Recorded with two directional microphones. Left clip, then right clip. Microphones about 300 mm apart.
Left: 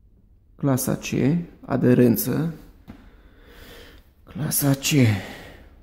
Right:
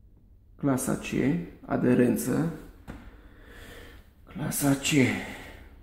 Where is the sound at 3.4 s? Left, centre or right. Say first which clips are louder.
Left 2 dB; left.